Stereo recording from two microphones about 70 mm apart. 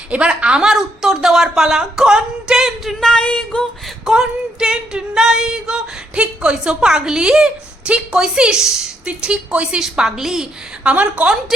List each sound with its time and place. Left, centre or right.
0.1 s speech: centre
3.0 s music: centre
3.8 s female singing: centre
9.8 s a woman's voice: centre
10.8 s a woman's voice: centre